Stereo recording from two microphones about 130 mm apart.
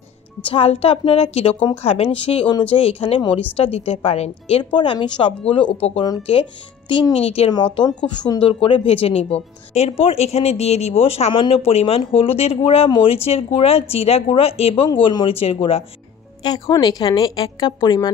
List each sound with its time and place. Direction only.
0.4 s speech: 45° left (ahead or behind)
4.7 s a woman's voice: 35° left (ahead or behind)
6.9 s speech: 50° left (ahead or behind)
16.4 s a woman's voice: 30° left (ahead or behind)